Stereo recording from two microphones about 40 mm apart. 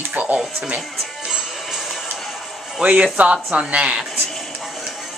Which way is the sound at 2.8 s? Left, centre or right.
Right.